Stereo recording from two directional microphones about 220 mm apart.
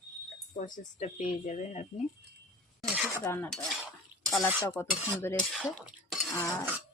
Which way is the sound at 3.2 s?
10° left (ahead or behind).